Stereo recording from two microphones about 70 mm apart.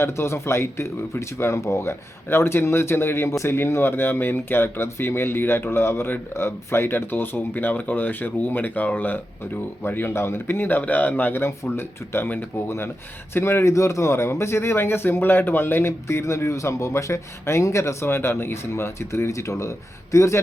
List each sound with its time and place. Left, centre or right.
0.0 s speech: left
18.0 s speech: left